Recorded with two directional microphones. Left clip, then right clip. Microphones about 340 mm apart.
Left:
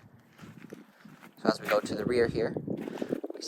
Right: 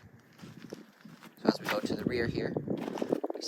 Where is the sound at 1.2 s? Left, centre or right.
Centre.